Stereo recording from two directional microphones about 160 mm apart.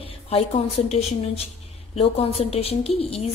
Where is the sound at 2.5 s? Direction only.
40° left (ahead or behind).